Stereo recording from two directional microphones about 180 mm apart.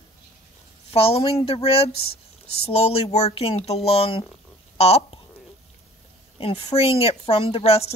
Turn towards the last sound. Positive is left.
turn(degrees=35)  # may be behind; listen again after turning